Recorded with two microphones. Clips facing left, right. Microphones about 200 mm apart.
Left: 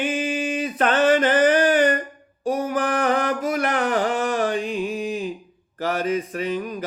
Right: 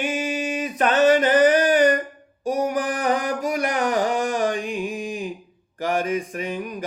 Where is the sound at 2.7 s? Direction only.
15° right (ahead or behind).